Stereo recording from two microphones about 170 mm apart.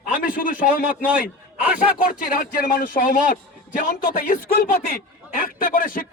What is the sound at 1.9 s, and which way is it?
A man's voice, 55° left (ahead or behind).